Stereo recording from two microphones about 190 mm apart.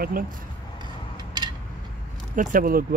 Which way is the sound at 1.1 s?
20° right (ahead or behind).